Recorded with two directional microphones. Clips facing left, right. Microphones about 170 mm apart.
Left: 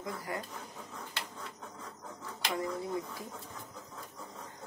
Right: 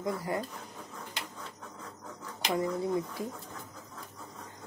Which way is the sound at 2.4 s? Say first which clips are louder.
Right 5 dB; 25° right (ahead or behind).